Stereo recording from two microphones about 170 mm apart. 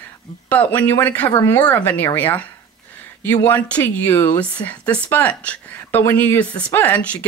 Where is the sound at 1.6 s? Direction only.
10° left (ahead or behind).